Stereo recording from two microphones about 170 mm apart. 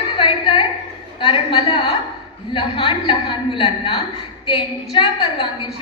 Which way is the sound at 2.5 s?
30° left (ahead or behind).